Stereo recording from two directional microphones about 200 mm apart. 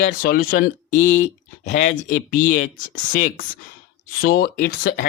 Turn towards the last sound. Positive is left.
turn(degrees=50)  # may be behind; listen again after turning